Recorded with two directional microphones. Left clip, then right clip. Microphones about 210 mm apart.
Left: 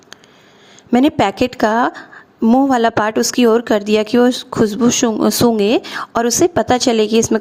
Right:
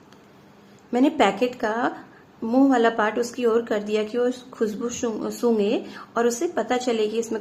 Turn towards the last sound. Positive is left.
turn(degrees=50)  # may be behind; listen again after turning